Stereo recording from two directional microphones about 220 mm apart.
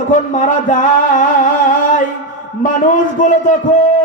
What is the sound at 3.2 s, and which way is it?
Speech, 35° left (ahead or behind).